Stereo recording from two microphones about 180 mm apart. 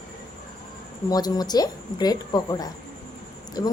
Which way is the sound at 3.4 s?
20° left (ahead or behind).